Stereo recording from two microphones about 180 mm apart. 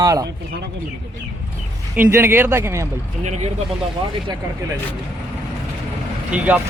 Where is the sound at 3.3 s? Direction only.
40° right (ahead or behind).